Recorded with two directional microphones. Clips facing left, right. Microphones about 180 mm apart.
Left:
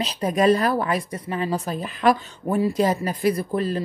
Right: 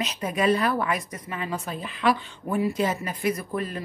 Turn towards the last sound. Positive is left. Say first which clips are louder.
# left 5 dB
turn(degrees=30)  # may be behind; listen again after turning